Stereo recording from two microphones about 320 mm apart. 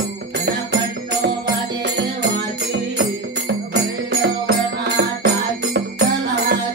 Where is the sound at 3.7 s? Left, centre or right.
Right.